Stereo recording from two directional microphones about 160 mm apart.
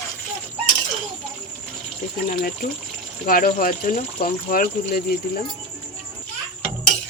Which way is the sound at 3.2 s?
60° left (ahead or behind).